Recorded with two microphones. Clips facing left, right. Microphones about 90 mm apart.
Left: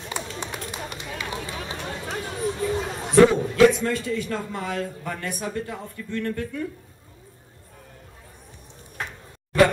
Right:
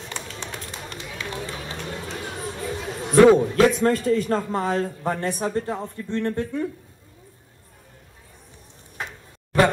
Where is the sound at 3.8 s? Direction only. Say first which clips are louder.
Right 6 dB; 40° right (ahead or behind).